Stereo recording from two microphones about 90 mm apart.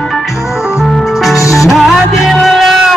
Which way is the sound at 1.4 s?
35° left (ahead or behind).